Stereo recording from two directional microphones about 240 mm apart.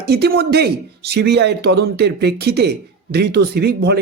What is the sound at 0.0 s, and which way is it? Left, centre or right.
Speech, right.